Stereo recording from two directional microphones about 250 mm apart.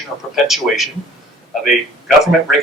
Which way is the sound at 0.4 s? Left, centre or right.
Centre.